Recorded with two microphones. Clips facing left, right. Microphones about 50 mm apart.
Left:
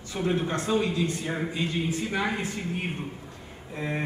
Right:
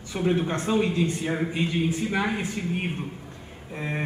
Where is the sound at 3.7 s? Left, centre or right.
Right.